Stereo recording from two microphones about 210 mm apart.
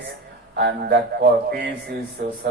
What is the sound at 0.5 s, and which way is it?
A man's voice, 50° right (ahead or behind).